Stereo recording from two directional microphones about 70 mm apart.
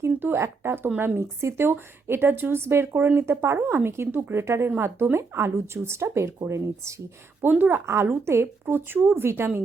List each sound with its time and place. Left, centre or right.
0.0 s speech: right
7.4 s speech: right